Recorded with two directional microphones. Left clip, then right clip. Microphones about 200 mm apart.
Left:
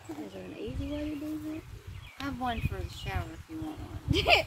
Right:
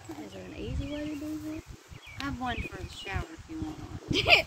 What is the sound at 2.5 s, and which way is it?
Speech, 45° left (ahead or behind).